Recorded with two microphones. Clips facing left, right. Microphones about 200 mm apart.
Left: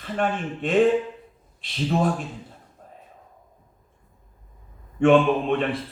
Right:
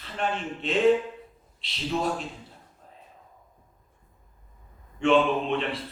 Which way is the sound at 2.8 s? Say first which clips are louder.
Left 8 dB; 50° left (ahead or behind).